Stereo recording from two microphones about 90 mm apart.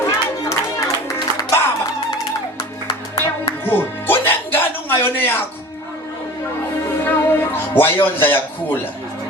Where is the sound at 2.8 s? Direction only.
70° left (ahead or behind).